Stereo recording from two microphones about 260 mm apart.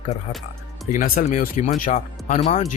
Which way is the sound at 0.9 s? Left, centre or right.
Left.